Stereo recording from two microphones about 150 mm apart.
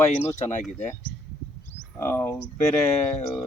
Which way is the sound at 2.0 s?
10° left (ahead or behind).